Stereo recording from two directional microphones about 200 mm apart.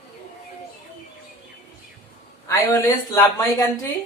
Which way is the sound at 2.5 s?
15° left (ahead or behind).